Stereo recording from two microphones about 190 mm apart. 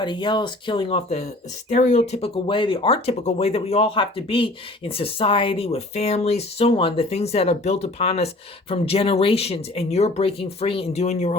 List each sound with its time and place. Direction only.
0.0 s speech: 25° left (ahead or behind)